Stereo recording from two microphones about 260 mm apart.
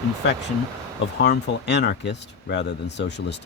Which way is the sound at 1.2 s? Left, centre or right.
Left.